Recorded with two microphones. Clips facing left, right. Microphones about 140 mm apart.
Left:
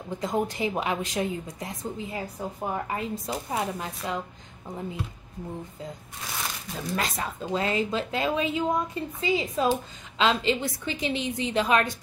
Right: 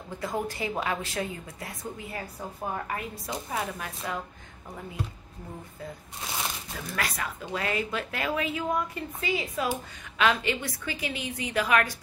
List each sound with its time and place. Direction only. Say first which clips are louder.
0.2 s a woman's voice: left 4 dB; 20° left (ahead or behind)
7.0 s a woman's voice: even; 25° left (ahead or behind)